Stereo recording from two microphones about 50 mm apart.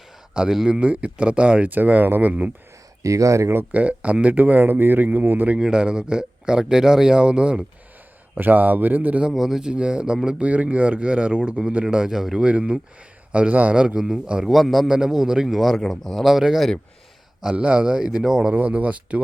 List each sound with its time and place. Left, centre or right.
0.4 s speech: centre
3.0 s speech: right
3.7 s speech: right
5.5 s a man's voice: centre
8.4 s speech: right
9.2 s a man's voice: centre
9.7 s speech: right
12.4 s speech: right
13.7 s a man's voice: centre
14.4 s a man's voice: centre
14.8 s a man's voice: centre
16.2 s a man's voice: centre
17.5 s speech: right
18.5 s speech: right